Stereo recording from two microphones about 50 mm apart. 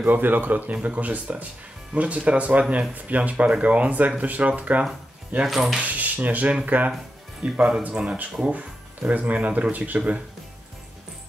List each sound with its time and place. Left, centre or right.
0.0 s speech: right
5.4 s speech: centre
5.8 s speech: right
9.9 s speech: right